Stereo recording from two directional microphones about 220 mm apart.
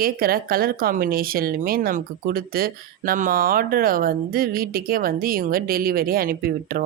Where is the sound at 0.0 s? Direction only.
40° right (ahead or behind).